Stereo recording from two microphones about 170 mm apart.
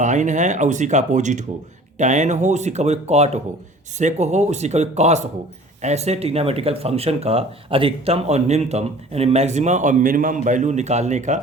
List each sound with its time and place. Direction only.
0.0 s speech: 45° right (ahead or behind)